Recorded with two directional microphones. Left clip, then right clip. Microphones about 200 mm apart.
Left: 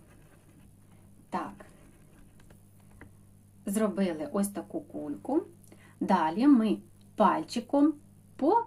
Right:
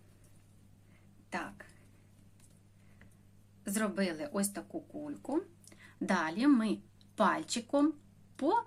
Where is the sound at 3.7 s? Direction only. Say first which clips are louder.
Left 5 dB; 15° right (ahead or behind).